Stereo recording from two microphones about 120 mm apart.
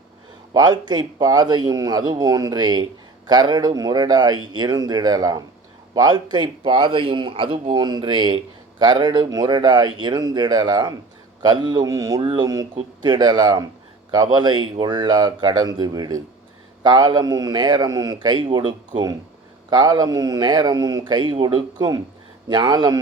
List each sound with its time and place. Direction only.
0.5 s speech: 35° right (ahead or behind)
12.2 s speech: 50° right (ahead or behind)
13.0 s speech: 40° right (ahead or behind)
19.7 s speech: 35° right (ahead or behind)